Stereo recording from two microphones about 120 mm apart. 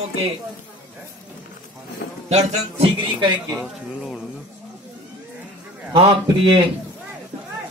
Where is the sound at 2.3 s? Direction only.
60° right (ahead or behind).